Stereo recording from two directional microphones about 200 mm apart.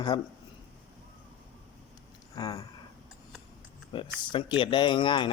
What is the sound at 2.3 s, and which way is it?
Speech, 20° left (ahead or behind).